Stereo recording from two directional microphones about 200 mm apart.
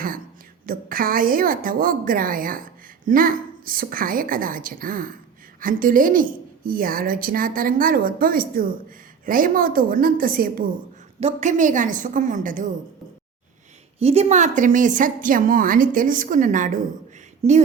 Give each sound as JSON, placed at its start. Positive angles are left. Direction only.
{"t": 0.7, "sound": "a woman's voice", "side_deg": -45}
{"t": 11.2, "sound": "a woman's voice", "side_deg": -35}
{"t": 14.0, "sound": "a woman's voice", "side_deg": -30}